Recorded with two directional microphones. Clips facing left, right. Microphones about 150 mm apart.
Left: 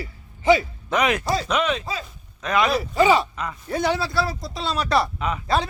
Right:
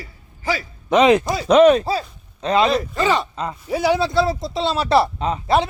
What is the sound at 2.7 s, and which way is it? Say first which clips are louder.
Speech: left 1 dB; 10° left (ahead or behind).